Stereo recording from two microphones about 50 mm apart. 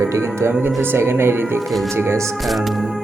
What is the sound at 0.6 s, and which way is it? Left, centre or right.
Speech, right.